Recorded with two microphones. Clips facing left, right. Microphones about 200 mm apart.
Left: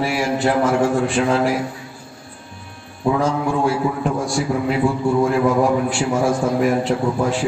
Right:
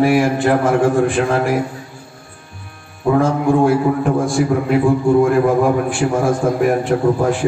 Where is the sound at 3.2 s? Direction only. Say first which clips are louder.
Right 8 dB; 55° right (ahead or behind).